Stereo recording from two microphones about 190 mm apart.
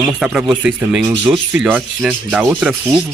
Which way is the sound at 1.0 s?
25° right (ahead or behind).